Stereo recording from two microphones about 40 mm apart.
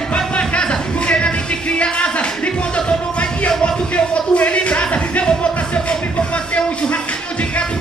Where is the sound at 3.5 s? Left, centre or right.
Left.